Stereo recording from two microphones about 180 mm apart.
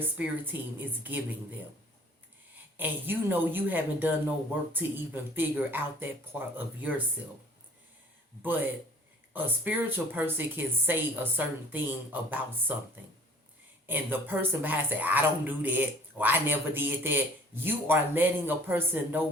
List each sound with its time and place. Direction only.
0.0 s speech: 10° right (ahead or behind)
2.7 s speech: 10° right (ahead or behind)
8.4 s speech: 10° right (ahead or behind)
13.8 s speech: 10° right (ahead or behind)